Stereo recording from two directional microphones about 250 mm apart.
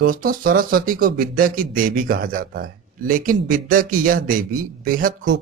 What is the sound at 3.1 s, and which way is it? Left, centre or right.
Speech, right.